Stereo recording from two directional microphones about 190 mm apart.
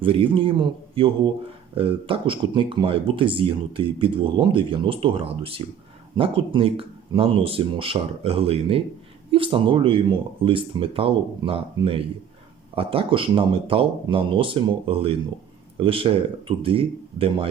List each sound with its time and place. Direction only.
0.0 s speech: 25° right (ahead or behind)